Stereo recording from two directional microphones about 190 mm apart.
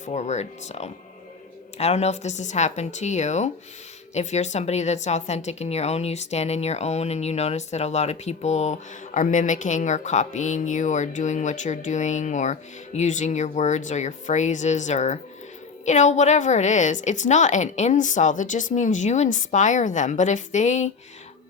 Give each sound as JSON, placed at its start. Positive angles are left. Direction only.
{"t": 0.0, "sound": "speech", "side_deg": 35}